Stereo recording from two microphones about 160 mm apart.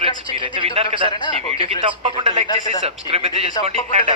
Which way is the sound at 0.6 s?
40° right (ahead or behind).